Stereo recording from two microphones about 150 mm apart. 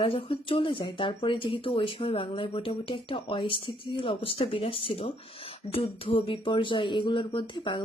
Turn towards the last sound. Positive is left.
turn(degrees=35)  # may be behind; listen again after turning